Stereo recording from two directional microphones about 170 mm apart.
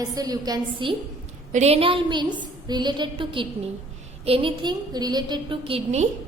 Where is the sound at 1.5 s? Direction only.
40° right (ahead or behind).